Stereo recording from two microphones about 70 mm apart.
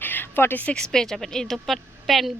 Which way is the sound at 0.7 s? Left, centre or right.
Centre.